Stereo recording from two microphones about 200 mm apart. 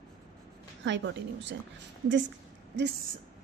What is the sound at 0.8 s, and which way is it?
Speech, 65° right (ahead or behind).